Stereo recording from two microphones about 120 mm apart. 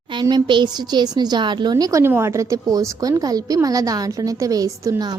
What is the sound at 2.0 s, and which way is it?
A woman's voice, 20° right (ahead or behind).